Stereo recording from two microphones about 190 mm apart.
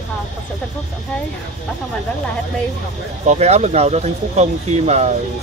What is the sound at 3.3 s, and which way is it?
Speech, 35° right (ahead or behind).